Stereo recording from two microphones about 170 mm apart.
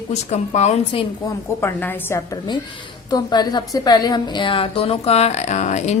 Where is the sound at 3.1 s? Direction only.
25° left (ahead or behind); by 6.0 s 40° left (ahead or behind).